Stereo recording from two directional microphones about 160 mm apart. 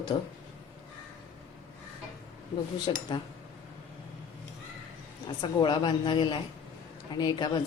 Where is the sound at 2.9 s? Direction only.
30° left (ahead or behind).